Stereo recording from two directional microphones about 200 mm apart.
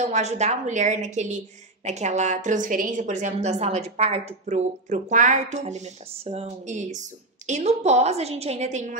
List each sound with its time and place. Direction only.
0.0 s a woman's voice: 35° right (ahead or behind)